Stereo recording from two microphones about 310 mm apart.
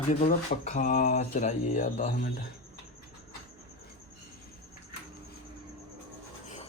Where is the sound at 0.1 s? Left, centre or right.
Left.